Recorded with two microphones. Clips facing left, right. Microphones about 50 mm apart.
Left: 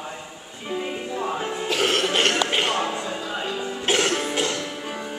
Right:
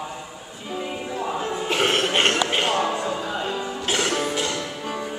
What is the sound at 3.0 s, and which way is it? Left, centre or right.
Music, right.